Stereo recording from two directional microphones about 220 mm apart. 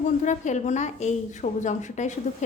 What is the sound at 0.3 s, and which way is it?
A woman's voice, 35° left (ahead or behind).